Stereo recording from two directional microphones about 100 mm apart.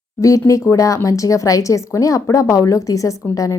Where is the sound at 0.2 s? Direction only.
35° left (ahead or behind).